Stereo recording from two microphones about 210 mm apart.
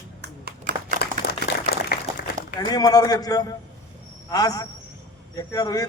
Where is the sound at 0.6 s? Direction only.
40° right (ahead or behind).